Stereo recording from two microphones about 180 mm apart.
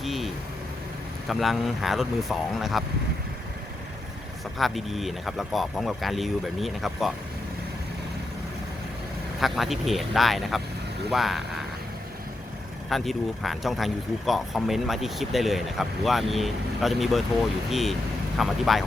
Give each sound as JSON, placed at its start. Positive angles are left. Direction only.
{"t": 0.0, "sound": "vehicle", "side_deg": 0}
{"t": 1.3, "sound": "speech", "side_deg": 0}
{"t": 4.5, "sound": "speech", "side_deg": 0}
{"t": 9.4, "sound": "speech", "side_deg": 0}
{"t": 12.9, "sound": "speech", "side_deg": 0}